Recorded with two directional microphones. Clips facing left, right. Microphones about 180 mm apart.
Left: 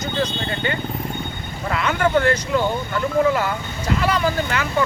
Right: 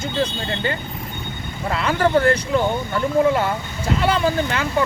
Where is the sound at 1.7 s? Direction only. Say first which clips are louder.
Right 1 dB; 30° right (ahead or behind).